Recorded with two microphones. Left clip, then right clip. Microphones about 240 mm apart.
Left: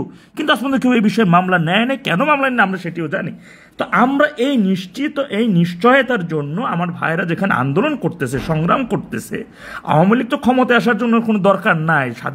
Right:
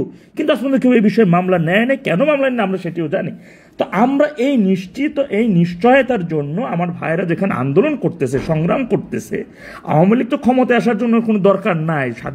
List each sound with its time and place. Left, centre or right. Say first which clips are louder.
0.4 s a man's voice: right 1 dB; centre